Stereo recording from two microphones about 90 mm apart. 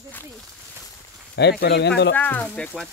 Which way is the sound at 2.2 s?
15° left (ahead or behind).